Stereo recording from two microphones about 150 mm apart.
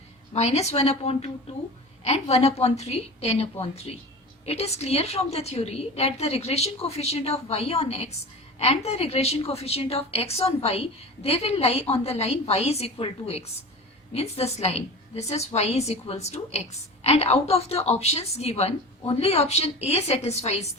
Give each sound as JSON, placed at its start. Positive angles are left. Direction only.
{"t": 0.3, "sound": "a woman's voice", "side_deg": 45}